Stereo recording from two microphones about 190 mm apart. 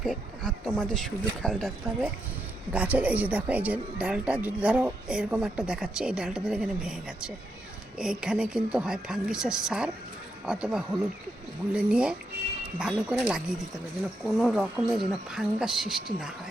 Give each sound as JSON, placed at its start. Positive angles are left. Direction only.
{"t": 0.0, "sound": "speech", "side_deg": 0}